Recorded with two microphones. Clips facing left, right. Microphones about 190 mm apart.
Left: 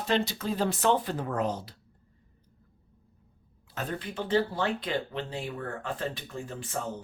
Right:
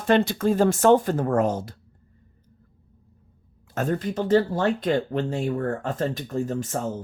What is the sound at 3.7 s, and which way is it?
A woman's voice, 45° right (ahead or behind).